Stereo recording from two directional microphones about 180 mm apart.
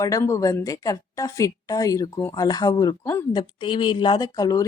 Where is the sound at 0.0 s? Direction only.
20° left (ahead or behind).